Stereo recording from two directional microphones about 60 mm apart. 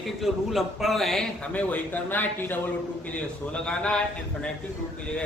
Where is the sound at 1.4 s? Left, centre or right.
Left.